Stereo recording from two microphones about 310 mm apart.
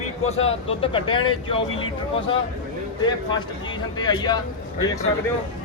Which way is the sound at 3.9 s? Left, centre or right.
Centre.